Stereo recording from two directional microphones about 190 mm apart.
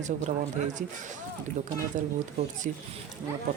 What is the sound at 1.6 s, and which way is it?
Speech, 40° right (ahead or behind).